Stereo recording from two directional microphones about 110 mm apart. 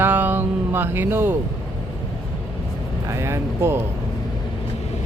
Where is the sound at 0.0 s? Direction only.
15° right (ahead or behind).